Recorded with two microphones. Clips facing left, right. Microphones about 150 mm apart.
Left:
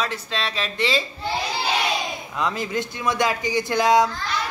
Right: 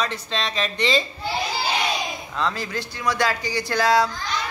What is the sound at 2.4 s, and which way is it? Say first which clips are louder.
Speech: left 2 dB; 20° left (ahead or behind).